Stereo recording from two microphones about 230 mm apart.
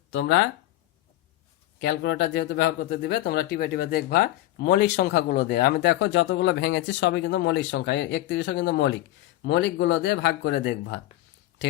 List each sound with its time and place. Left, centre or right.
0.1 s speech: left
1.8 s speech: left